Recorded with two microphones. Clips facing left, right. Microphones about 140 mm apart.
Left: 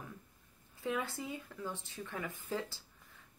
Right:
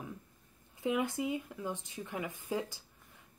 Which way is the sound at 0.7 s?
15° right (ahead or behind).